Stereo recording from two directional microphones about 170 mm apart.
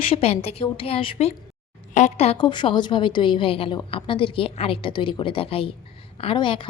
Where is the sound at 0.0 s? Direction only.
35° left (ahead or behind).